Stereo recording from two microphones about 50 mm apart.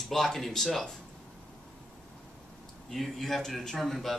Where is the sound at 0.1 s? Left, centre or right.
Centre.